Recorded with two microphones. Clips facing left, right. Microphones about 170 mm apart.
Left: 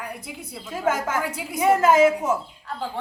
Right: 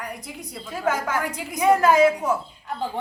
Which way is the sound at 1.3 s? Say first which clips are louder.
Right 1 dB; 5° left (ahead or behind).